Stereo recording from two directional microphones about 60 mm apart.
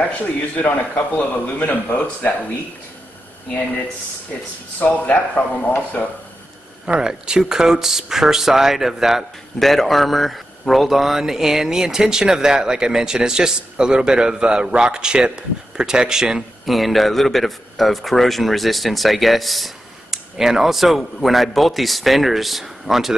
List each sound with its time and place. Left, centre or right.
0.0 s a man's voice: left
4.7 s a man's voice: left
6.9 s speech: centre
16.7 s a man's voice: centre